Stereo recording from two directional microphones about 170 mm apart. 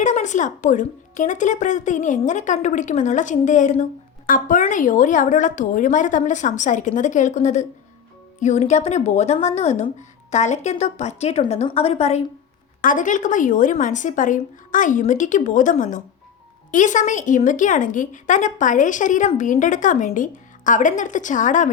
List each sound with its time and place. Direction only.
0.0 s a woman's voice: 45° left (ahead or behind)
12.8 s a woman's voice: 50° left (ahead or behind)